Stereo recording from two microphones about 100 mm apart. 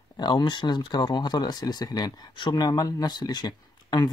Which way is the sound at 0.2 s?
45° left (ahead or behind).